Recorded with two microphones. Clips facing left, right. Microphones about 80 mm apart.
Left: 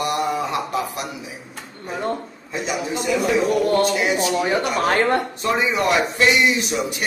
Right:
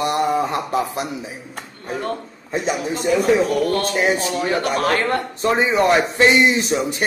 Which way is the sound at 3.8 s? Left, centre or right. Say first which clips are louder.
Even; right.